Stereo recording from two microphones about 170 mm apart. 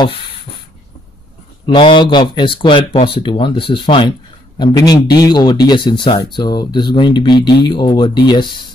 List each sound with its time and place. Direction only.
1.7 s speech: 30° left (ahead or behind)